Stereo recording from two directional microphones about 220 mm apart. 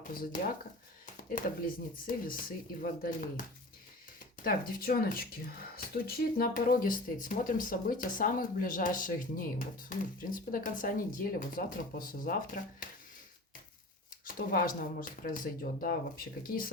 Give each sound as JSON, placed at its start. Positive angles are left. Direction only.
{"t": 0.1, "sound": "speech", "side_deg": 40}
{"t": 4.4, "sound": "speech", "side_deg": 40}
{"t": 14.3, "sound": "speech", "side_deg": 40}